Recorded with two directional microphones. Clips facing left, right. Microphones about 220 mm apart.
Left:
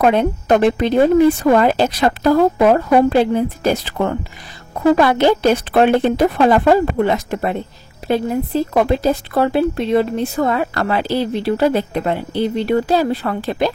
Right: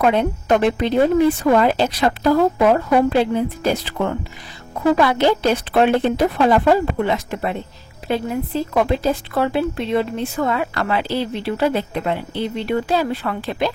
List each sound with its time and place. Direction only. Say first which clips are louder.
0.0 s speech: left 3 dB; 45° left (ahead or behind)